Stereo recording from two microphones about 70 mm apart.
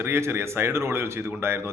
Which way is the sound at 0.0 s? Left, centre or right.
Right.